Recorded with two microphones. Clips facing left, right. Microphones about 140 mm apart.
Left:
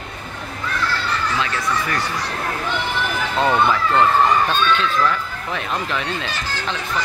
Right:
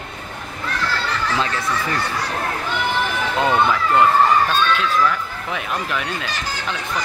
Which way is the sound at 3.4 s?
15° right (ahead or behind).